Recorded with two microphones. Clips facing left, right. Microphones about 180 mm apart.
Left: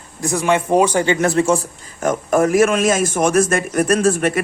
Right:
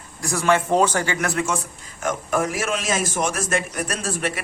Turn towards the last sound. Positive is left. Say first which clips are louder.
# left 11 dB
turn(degrees=50)  # may be behind; listen again after turning